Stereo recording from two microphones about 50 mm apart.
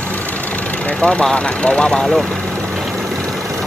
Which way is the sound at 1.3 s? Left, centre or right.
Left.